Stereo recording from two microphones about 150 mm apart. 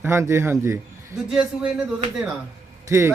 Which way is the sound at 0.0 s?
15° right (ahead or behind).